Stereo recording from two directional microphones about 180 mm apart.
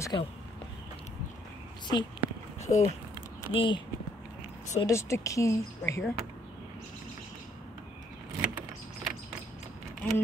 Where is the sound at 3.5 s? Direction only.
30° left (ahead or behind).